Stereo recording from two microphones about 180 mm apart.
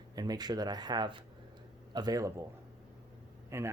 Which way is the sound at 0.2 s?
20° right (ahead or behind).